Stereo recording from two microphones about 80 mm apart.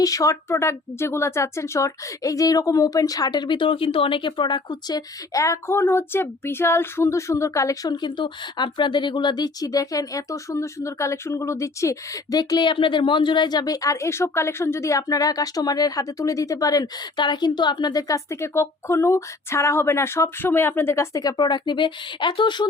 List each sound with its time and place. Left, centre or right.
0.0 s speech: left
7.9 s speech: left
12.4 s speech: left
18.1 s speech: left
21.2 s speech: left